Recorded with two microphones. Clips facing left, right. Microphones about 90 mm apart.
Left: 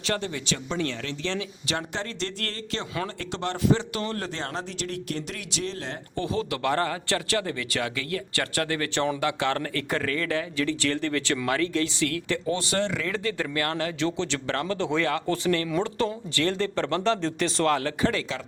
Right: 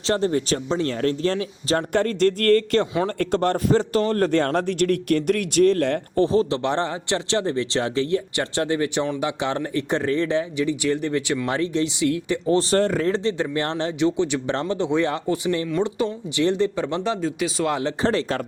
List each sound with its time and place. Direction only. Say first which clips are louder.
0.1 s a man's voice: right 8 dB; 40° right (ahead or behind); by 6.0 s 60° right (ahead or behind)
6.1 s speech: right 8 dB; 35° right (ahead or behind)
12.5 s speech: right 9 dB; 35° right (ahead or behind); by 17.7 s 10° right (ahead or behind)
17.7 s speech: even; 20° right (ahead or behind)
18.0 s speech: right 8 dB; 30° right (ahead or behind)